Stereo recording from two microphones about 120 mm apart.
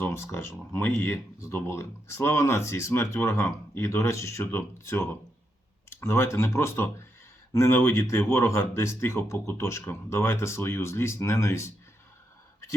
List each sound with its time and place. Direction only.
0.0 s speech: 20° left (ahead or behind)